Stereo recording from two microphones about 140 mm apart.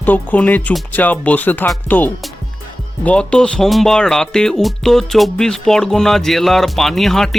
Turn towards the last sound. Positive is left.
turn(degrees=0)  # may be behind; listen again after turning